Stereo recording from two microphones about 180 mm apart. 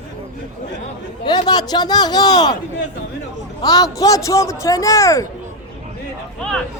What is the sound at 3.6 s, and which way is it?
A man's voice, 20° left (ahead or behind).